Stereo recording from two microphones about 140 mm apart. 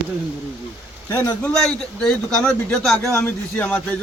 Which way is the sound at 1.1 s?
15° left (ahead or behind).